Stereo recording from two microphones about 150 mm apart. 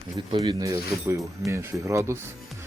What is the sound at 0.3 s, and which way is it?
Speech, 25° right (ahead or behind).